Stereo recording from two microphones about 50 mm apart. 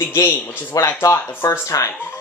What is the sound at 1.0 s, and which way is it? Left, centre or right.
Speech, left.